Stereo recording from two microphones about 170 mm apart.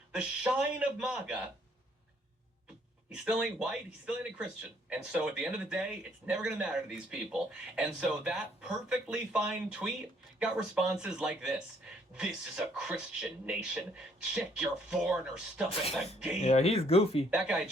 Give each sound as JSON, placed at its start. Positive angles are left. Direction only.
{"t": 0.1, "sound": "a man's voice", "side_deg": -5}
{"t": 3.1, "sound": "speech", "side_deg": -5}
{"t": 16.4, "sound": "speech", "side_deg": 40}
{"t": 17.3, "sound": "speech", "side_deg": -5}